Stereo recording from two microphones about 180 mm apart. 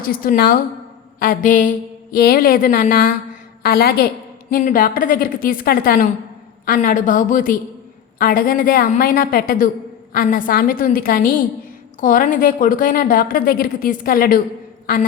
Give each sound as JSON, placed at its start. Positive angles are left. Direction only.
{"t": 0.0, "sound": "a woman's voice", "side_deg": 55}